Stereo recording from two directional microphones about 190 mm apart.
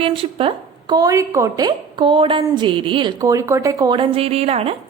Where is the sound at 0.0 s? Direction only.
30° right (ahead or behind).